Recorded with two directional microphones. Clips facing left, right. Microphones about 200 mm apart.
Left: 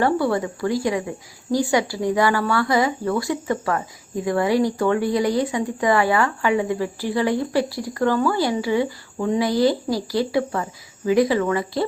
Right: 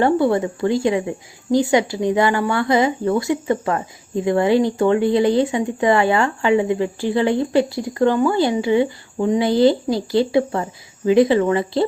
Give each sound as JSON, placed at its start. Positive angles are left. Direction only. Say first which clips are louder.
{"t": 0.0, "sound": "a woman's voice", "louder": "right 4 dB", "side_deg": -25}